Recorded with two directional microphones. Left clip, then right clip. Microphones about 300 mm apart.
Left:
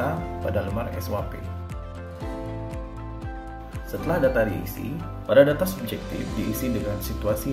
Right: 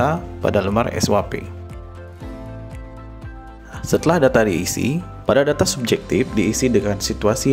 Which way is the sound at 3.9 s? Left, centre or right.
Right.